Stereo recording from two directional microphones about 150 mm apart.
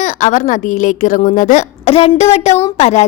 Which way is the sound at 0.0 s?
55° left (ahead or behind).